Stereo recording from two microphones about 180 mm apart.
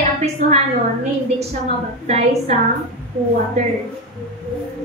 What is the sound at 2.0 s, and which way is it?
Speech, 40° right (ahead or behind).